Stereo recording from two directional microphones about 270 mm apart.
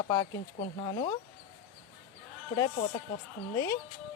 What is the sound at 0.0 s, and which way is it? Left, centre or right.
A woman's voice, centre.